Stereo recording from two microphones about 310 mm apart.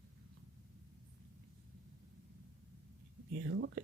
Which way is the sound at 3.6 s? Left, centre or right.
Right.